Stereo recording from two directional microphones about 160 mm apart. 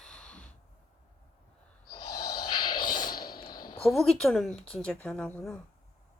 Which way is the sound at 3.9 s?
Centre (ahead or behind).